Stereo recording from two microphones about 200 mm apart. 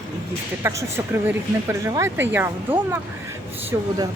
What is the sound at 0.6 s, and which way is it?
Speech, 10° right (ahead or behind).